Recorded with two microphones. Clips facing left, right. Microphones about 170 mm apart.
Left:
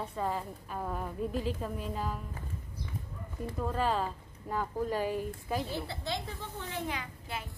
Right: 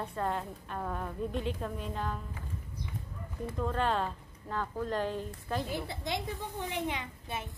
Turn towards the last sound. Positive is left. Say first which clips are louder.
# right 1 dB
turn(degrees=-20)  # may be behind; listen again after turning